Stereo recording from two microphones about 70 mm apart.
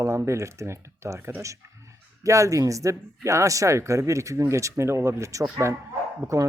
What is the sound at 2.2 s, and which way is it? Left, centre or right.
Speech, right.